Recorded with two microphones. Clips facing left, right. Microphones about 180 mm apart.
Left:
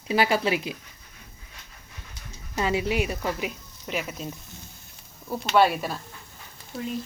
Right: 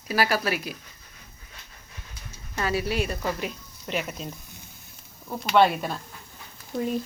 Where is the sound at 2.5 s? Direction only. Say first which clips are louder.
Left 2 dB; 20° left (ahead or behind).